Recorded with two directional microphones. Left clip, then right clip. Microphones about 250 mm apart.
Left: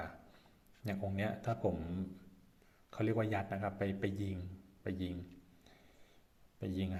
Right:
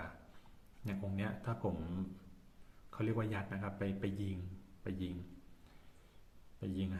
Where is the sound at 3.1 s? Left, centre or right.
Right.